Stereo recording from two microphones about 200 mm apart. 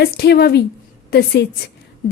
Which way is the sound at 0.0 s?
55° left (ahead or behind).